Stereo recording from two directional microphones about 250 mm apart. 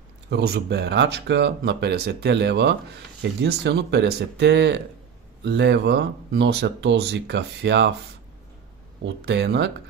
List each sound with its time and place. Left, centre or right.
0.3 s speech: right
9.0 s speech: right